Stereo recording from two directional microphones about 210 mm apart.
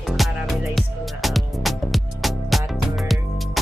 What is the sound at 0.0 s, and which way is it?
Music, centre (ahead or behind).